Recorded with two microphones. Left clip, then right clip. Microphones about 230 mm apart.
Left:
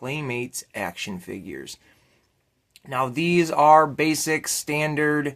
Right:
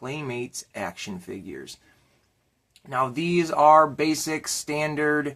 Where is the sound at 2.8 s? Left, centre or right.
Left.